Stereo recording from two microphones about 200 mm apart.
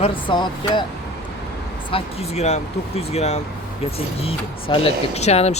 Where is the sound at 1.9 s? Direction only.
30° left (ahead or behind).